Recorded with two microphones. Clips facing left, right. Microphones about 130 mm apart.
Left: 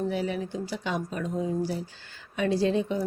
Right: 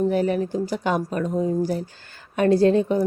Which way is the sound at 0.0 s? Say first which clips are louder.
Right 8 dB; 50° right (ahead or behind).